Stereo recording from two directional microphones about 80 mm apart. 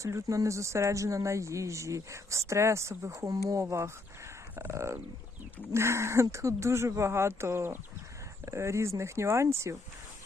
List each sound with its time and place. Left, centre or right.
0.0 s speech: right